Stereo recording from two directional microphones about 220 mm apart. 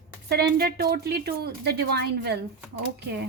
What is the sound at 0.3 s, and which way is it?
A woman's voice, 45° right (ahead or behind).